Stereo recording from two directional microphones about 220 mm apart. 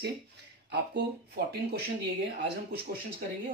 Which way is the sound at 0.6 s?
50° right (ahead or behind).